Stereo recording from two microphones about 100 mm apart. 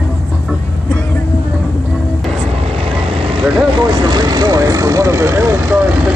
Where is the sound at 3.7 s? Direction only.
45° right (ahead or behind); by 5.5 s 30° right (ahead or behind).